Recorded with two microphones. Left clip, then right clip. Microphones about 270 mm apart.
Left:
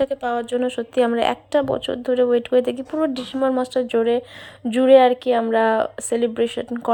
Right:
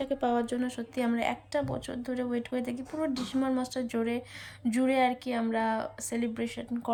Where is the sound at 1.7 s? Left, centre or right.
Left.